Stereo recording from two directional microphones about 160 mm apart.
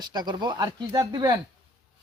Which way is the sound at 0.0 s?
25° right (ahead or behind).